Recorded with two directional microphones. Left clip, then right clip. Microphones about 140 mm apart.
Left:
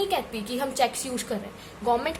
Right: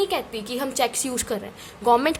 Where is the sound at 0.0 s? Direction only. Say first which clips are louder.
Right 2 dB; 40° right (ahead or behind).